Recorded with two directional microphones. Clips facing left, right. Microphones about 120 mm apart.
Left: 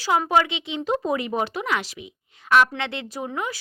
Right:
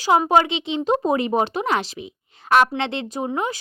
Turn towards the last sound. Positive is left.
turn(degrees=-25)  # may be behind; listen again after turning